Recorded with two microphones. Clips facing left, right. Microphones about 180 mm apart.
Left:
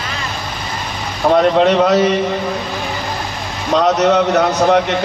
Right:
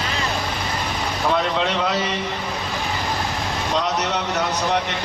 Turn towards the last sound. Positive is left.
turn(degrees=50)  # may be behind; listen again after turning